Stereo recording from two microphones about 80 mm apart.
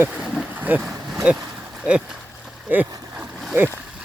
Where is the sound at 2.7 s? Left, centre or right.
Right.